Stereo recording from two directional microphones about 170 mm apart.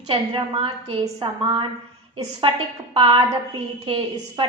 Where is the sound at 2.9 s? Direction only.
30° right (ahead or behind).